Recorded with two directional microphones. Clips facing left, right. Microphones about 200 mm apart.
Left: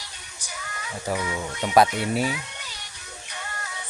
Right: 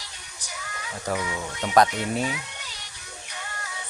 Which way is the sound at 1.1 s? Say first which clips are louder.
Left 1 dB; 5° left (ahead or behind).